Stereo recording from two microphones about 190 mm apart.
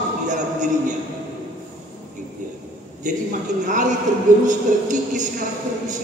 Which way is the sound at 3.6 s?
40° right (ahead or behind).